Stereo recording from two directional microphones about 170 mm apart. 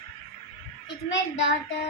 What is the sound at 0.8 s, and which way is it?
Speech, 90° left.